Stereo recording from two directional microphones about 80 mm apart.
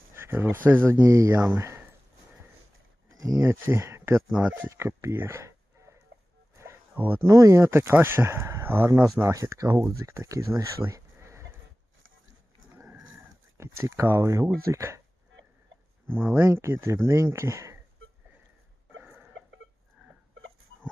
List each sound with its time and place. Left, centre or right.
0.1 s a sound: right
1.0 s speech: right
1.5 s a sound: right
3.2 s speech: right
3.5 s speech: right
4.3 s speech: centre
4.8 s speech: right
5.1 s a sound: right
6.9 s speech: right
7.3 s speech: right
9.2 s speech: right
13.6 s speech: right
16.0 s speech: right
19.0 s a sound: centre